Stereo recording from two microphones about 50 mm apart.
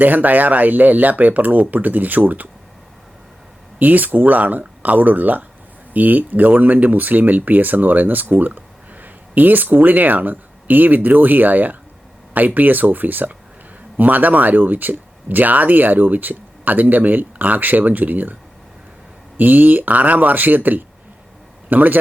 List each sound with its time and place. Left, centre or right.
0.0 s speech: right
3.8 s speech: right
19.4 s speech: right